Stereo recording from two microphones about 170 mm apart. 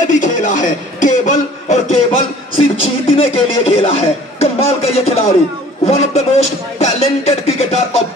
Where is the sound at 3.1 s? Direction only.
30° left (ahead or behind).